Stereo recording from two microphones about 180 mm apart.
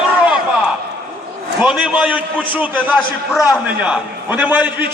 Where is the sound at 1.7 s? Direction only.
5° right (ahead or behind).